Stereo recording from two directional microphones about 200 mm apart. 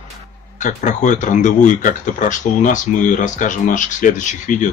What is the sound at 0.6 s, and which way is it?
Speech, 40° left (ahead or behind).